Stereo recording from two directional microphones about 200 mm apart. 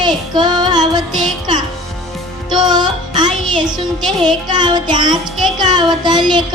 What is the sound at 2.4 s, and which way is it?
Music, 20° right (ahead or behind).